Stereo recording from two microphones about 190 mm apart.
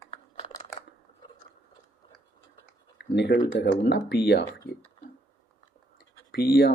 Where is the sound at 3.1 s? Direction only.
65° left (ahead or behind).